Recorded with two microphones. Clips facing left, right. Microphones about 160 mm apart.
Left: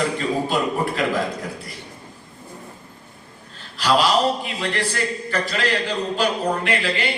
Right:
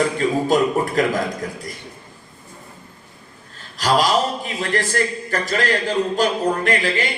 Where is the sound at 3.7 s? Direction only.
40° right (ahead or behind).